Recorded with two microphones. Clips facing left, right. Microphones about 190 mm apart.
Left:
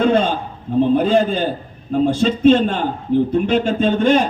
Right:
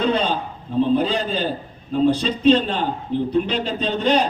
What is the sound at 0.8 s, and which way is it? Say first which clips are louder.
A man's voice: left 4 dB; 50° left (ahead or behind).